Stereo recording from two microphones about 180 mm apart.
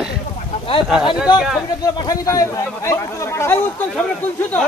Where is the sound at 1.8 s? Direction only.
20° left (ahead or behind).